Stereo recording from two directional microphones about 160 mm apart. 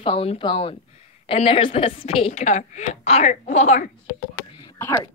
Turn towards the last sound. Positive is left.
turn(degrees=15)  # may be behind; listen again after turning